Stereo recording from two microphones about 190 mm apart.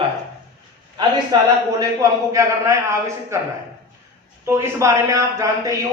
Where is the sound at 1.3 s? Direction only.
20° right (ahead or behind).